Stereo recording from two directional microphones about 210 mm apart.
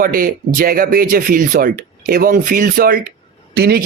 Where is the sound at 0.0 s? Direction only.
45° right (ahead or behind).